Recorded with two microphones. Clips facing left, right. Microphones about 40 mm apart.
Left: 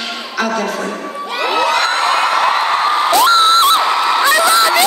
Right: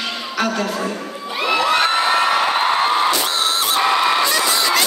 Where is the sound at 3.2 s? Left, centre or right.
Left.